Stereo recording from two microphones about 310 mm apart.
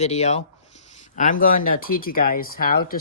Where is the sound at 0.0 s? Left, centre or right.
Left.